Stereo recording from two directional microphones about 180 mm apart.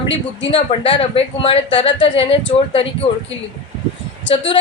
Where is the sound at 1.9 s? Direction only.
90° left.